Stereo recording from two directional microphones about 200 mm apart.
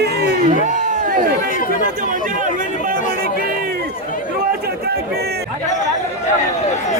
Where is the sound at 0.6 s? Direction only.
40° right (ahead or behind).